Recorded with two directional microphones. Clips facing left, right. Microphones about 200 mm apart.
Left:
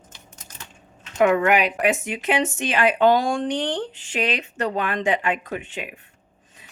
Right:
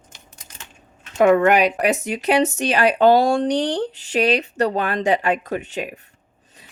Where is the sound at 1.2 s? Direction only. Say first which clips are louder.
Right 4 dB; 40° right (ahead or behind).